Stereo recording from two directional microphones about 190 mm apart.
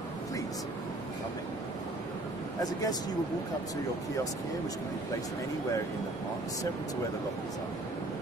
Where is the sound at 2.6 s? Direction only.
20° left (ahead or behind).